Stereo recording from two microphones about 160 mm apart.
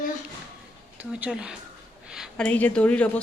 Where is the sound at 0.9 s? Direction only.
10° right (ahead or behind).